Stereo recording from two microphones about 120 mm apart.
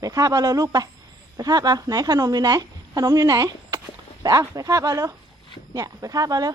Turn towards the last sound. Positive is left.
turn(degrees=-30)  # may be behind; listen again after turning